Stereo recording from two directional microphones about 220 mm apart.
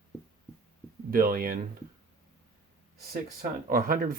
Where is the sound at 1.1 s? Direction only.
40° right (ahead or behind).